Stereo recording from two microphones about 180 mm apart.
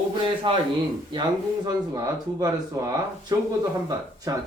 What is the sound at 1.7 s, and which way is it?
Speech, 20° right (ahead or behind).